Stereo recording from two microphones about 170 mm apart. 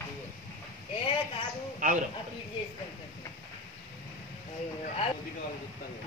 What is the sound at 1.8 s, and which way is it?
Speech, 50° right (ahead or behind).